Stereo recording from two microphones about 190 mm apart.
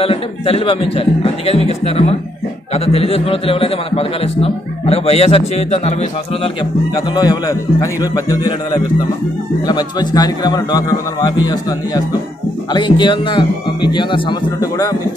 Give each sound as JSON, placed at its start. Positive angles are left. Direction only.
{"t": 0.0, "sound": "a man's voice", "side_deg": 30}
{"t": 7.2, "sound": "speech", "side_deg": 20}